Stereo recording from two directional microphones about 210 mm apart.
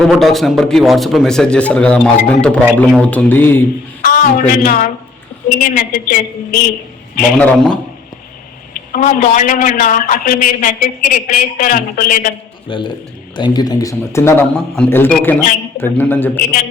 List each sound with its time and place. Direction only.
0.0 s a man's voice: centre (ahead or behind)
4.0 s a woman's voice: 40° left (ahead or behind)
7.3 s a man's voice: 5° left (ahead or behind)
8.9 s a man's voice: 40° left (ahead or behind)
12.6 s a man's voice: 25° left (ahead or behind)